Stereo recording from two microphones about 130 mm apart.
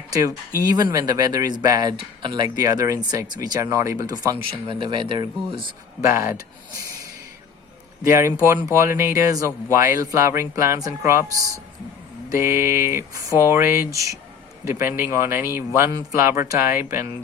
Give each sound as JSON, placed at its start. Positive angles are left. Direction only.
{"t": 0.1, "sound": "speech", "side_deg": -30}
{"t": 6.1, "sound": "speech", "side_deg": -20}
{"t": 8.0, "sound": "speech", "side_deg": -25}